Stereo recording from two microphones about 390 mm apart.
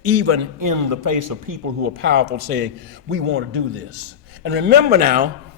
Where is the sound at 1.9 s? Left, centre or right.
Right.